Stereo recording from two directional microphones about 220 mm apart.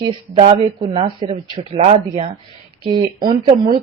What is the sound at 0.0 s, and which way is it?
A woman's voice, 25° right (ahead or behind).